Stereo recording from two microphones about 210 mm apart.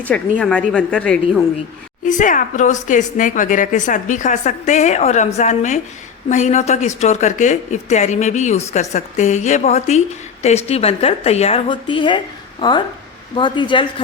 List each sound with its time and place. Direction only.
0.1 s a woman's voice: 5° left (ahead or behind)
2.0 s a woman's voice: 40° left (ahead or behind); by 13.8 s 20° left (ahead or behind)